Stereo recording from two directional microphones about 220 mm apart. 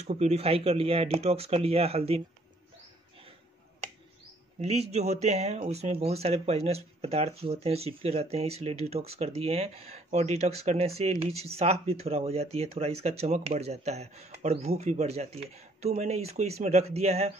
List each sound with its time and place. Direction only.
0.0 s speech: 30° right (ahead or behind)
4.6 s speech: 30° right (ahead or behind)